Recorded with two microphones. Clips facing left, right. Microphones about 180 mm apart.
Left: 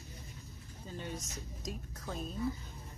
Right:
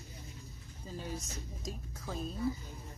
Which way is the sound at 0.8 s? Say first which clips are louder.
Right 1 dB; 5° right (ahead or behind).